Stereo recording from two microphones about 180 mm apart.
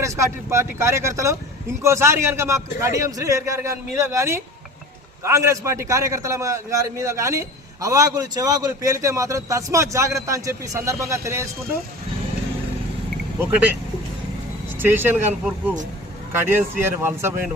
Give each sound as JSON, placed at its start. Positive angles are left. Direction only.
{"t": 0.0, "sound": "a man's voice", "side_deg": -15}
{"t": 13.4, "sound": "a man's voice", "side_deg": -10}
{"t": 14.8, "sound": "a man's voice", "side_deg": -10}